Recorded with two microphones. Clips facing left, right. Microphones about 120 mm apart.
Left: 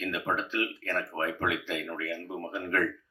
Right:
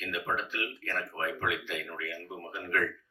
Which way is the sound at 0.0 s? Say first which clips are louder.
Left 3 dB; 35° left (ahead or behind).